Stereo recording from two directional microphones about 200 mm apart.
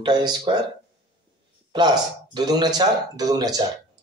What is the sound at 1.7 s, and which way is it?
Speech, 20° right (ahead or behind).